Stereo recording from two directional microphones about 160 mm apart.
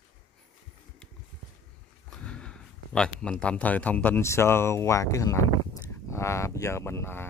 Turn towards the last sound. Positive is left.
turn(degrees=15)  # may be behind; listen again after turning